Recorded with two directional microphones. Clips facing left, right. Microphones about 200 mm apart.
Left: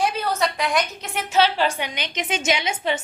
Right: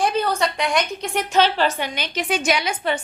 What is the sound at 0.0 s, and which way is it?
A woman's voice, centre (ahead or behind).